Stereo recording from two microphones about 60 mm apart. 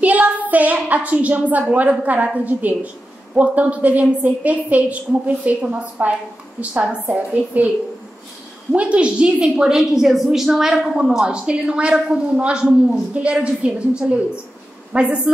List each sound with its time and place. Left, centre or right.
0.0 s a woman's voice: right
8.7 s a woman's voice: right